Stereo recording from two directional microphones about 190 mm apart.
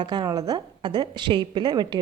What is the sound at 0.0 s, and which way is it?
A woman's voice, 20° right (ahead or behind).